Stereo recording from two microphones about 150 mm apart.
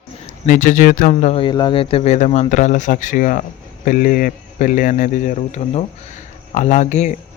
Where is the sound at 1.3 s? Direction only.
30° left (ahead or behind).